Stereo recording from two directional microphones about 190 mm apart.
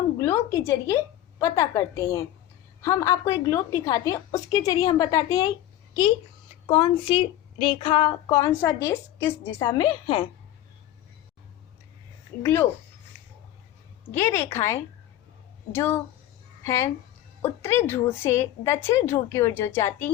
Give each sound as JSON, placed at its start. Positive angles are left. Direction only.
{"t": 0.2, "sound": "a sound", "side_deg": 15}
{"t": 1.4, "sound": "a woman's voice", "side_deg": 15}
{"t": 6.7, "sound": "a woman's voice", "side_deg": 30}
{"t": 12.4, "sound": "a woman's voice", "side_deg": 10}
{"t": 14.1, "sound": "a woman's voice", "side_deg": 15}